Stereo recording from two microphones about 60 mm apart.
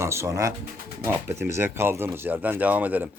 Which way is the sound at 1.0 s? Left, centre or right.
Right.